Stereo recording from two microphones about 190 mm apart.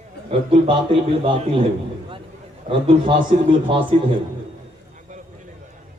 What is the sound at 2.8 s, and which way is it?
A man's voice, 25° right (ahead or behind).